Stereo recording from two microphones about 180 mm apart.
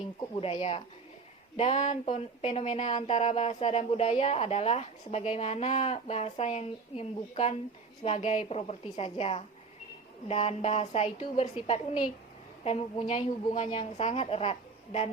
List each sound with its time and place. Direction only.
0.2 s speech: 35° left (ahead or behind)